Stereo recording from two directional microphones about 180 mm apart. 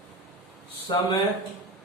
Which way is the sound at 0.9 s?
25° left (ahead or behind).